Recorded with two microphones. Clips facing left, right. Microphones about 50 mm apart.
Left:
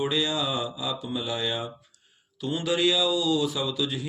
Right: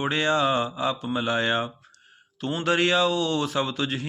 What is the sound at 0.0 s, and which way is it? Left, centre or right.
Speech, right.